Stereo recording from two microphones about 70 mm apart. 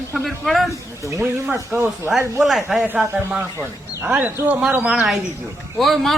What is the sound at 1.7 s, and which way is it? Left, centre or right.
Speech, right.